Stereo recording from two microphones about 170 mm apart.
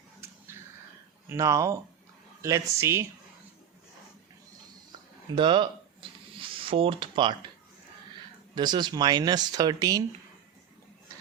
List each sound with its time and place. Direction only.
1.3 s speech: 15° right (ahead or behind)
4.9 s a sound: 30° right (ahead or behind)
8.5 s speech: 25° right (ahead or behind)